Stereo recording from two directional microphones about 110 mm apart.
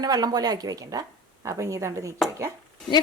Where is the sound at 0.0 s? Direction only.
35° right (ahead or behind).